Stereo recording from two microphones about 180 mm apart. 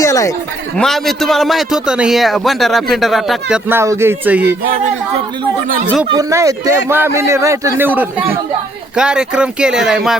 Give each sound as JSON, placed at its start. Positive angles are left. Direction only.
{"t": 0.0, "sound": "a sound", "side_deg": 15}
{"t": 0.8, "sound": "a man's voice", "side_deg": 0}
{"t": 3.7, "sound": "a man's voice", "side_deg": -15}
{"t": 6.1, "sound": "a man's voice", "side_deg": -20}